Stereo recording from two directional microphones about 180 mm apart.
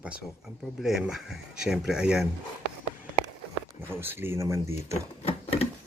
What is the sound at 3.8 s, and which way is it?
Speech, 10° right (ahead or behind).